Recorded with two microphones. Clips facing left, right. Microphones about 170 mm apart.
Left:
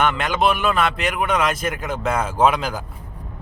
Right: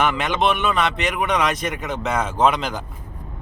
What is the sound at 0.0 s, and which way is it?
Speech, centre (ahead or behind).